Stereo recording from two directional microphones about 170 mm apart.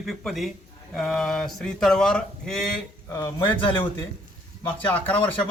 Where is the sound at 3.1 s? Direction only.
25° left (ahead or behind).